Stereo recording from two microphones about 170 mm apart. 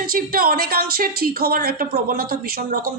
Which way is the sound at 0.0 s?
60° right (ahead or behind).